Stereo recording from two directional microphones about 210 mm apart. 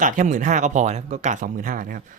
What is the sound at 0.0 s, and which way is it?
Speech, 40° right (ahead or behind).